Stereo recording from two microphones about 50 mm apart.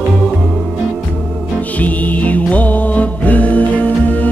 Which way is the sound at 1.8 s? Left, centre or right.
Left.